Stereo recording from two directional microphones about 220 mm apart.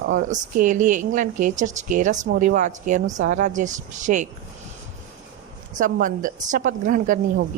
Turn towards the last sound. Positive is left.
turn(degrees=-35)  # may be behind; listen again after turning